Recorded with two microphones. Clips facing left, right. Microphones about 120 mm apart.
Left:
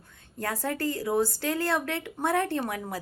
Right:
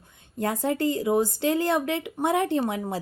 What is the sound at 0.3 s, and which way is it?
Speech, 20° right (ahead or behind).